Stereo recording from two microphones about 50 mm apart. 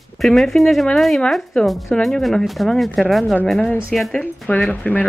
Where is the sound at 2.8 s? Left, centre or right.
Centre.